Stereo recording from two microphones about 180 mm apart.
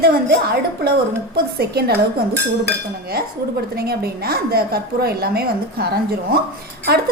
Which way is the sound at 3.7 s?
60° right (ahead or behind).